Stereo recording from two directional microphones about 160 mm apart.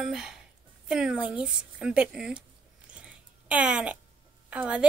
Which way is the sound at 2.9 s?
10° right (ahead or behind).